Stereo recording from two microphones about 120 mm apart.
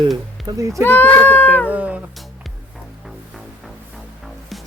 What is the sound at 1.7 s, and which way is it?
Cat, 10° right (ahead or behind).